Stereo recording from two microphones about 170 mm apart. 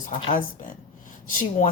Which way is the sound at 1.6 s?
50° left (ahead or behind).